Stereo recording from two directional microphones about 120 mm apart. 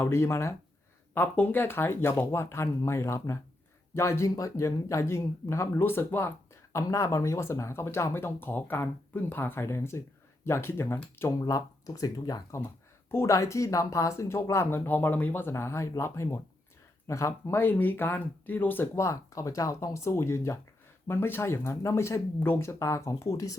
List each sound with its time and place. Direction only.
0.0 s speech: 25° left (ahead or behind)